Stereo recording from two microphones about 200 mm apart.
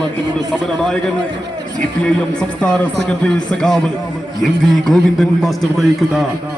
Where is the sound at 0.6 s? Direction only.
Centre (ahead or behind).